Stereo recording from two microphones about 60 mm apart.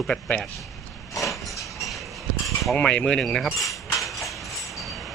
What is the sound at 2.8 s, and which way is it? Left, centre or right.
Speech, centre.